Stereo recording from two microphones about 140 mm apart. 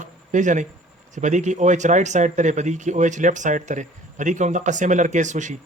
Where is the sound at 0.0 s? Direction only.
65° right (ahead or behind).